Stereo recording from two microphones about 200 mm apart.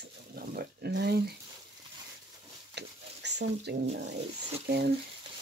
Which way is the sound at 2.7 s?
60° right (ahead or behind).